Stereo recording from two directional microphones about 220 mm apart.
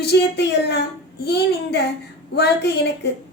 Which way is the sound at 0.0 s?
50° left (ahead or behind).